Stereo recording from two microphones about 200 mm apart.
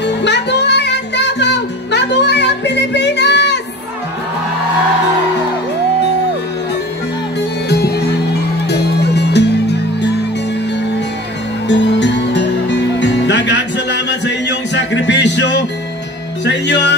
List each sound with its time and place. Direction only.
0.0 s music: 60° left (ahead or behind)
7.7 s music: 55° left (ahead or behind)
11.6 s music: 60° left (ahead or behind)